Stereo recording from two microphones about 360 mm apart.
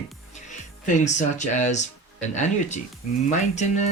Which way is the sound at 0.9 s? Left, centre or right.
Centre.